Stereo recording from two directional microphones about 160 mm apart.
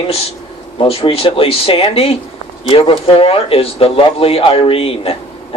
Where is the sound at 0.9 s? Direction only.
35° left (ahead or behind).